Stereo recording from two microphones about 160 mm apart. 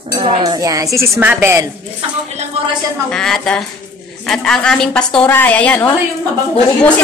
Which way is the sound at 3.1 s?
5° left (ahead or behind).